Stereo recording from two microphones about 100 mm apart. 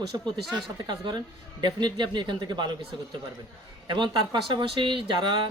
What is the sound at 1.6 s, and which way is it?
Speech, 50° right (ahead or behind).